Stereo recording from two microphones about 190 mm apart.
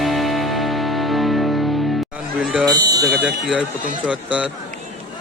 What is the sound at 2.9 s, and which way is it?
Fire alarm, 20° right (ahead or behind).